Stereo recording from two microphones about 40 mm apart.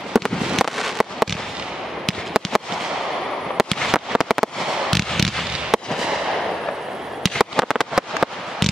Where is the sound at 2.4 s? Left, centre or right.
Centre.